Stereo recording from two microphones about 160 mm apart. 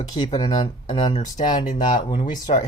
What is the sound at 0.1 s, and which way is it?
Speech, 25° left (ahead or behind).